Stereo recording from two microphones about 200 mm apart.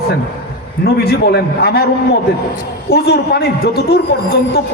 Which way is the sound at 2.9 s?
55° left (ahead or behind).